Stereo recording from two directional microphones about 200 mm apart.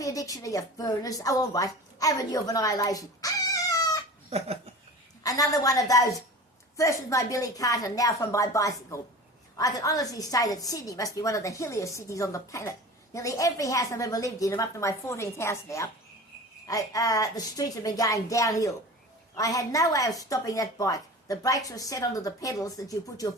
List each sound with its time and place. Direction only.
0.0 s a woman's voice: 15° left (ahead or behind)
4.3 s a sound: 30° right (ahead or behind)
5.2 s a woman's voice: 15° left (ahead or behind)